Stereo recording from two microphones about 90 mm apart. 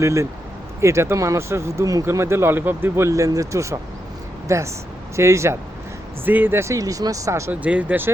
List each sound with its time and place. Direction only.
0.0 s speech: 35° right (ahead or behind)
6.2 s speech: 20° right (ahead or behind)
7.5 s speech: 15° right (ahead or behind)